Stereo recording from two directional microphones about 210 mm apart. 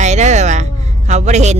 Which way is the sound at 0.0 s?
35° right (ahead or behind).